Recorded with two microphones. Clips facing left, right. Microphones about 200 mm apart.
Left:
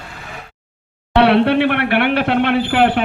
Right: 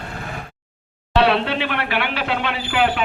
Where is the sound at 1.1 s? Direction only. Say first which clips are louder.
Left 6 dB; 60° left (ahead or behind).